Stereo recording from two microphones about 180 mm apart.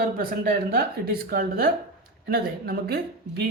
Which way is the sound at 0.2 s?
55° right (ahead or behind).